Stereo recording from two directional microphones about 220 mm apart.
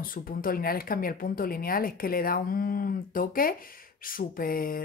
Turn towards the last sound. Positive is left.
turn(degrees=40)  # may be behind; listen again after turning